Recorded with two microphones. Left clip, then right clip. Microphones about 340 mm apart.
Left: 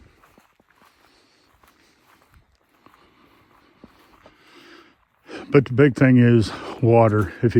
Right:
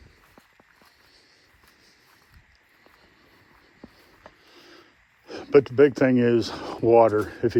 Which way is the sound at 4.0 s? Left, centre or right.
Centre.